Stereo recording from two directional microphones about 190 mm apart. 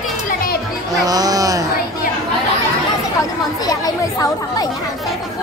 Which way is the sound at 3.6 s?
20° left (ahead or behind).